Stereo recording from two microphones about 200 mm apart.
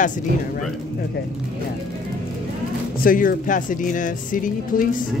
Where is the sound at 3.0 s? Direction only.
45° left (ahead or behind).